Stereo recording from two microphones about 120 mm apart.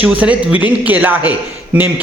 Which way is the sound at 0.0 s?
10° right (ahead or behind).